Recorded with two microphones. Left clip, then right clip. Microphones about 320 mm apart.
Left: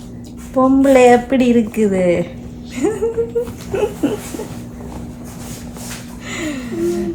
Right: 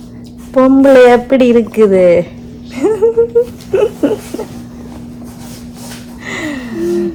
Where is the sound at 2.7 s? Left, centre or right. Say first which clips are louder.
Right 6 dB; centre.